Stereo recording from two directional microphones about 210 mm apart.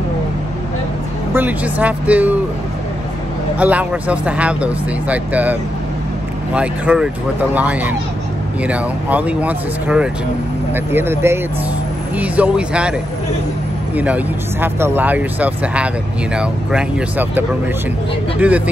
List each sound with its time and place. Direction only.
1.3 s speech: 10° right (ahead or behind)
3.5 s speech: 5° right (ahead or behind)
13.9 s speech: 5° right (ahead or behind)